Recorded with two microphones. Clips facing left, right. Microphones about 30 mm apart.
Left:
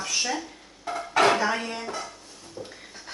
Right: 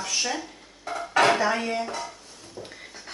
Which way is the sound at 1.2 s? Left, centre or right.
Centre.